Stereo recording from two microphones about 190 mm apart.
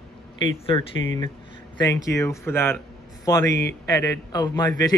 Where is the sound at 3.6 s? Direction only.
15° left (ahead or behind).